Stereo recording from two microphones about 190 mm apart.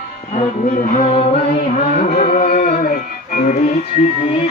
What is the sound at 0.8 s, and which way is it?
Music, 45° left (ahead or behind).